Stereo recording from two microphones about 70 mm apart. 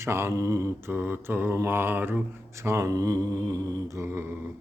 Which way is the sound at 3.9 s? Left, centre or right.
Right.